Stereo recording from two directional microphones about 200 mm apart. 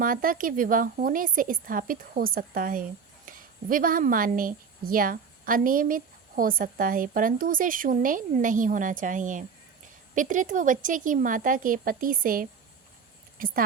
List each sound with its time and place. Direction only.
0.0 s a woman's voice: 45° right (ahead or behind)